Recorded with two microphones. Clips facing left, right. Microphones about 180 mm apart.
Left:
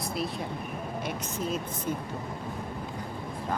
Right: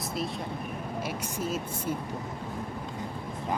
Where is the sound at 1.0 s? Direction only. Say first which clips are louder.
Even; 5° right (ahead or behind).